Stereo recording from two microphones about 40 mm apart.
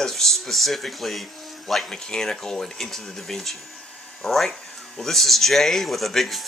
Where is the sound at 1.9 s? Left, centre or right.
Centre.